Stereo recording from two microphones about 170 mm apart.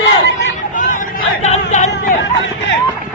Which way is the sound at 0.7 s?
50° left (ahead or behind).